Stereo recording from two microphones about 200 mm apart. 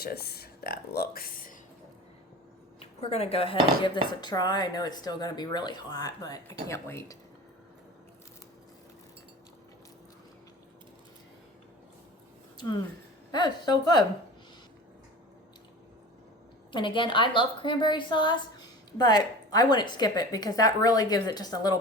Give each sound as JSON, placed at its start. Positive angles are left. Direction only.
{"t": 0.0, "sound": "speech", "side_deg": 50}
{"t": 3.0, "sound": "a woman's voice", "side_deg": 30}
{"t": 12.5, "sound": "a woman's voice", "side_deg": 20}
{"t": 16.7, "sound": "a woman's voice", "side_deg": 25}